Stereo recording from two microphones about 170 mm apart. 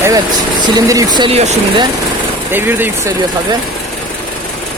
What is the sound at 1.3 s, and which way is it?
Speech, 40° right (ahead or behind).